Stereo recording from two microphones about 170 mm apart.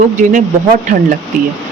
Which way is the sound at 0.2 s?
50° right (ahead or behind).